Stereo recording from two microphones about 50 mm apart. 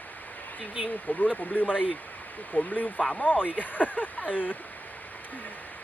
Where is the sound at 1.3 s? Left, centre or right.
Left.